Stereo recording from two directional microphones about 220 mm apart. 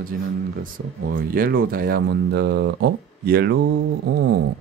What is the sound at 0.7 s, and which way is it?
Speech, 40° right (ahead or behind).